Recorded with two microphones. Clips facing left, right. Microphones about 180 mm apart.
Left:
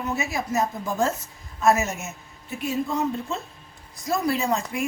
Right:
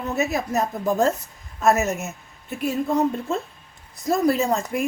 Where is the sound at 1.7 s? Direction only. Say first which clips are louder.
Right 3 dB; 60° right (ahead or behind).